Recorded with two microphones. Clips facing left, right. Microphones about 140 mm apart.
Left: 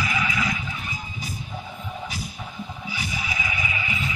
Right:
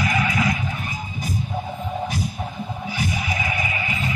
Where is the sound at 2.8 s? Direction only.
50° right (ahead or behind).